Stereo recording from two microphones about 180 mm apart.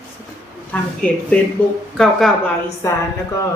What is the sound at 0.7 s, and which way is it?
A man's voice, 5° left (ahead or behind).